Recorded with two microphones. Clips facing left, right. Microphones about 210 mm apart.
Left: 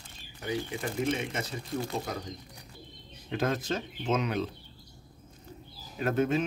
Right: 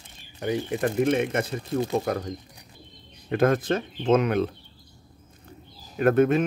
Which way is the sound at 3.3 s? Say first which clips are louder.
Right 8 dB; 55° right (ahead or behind).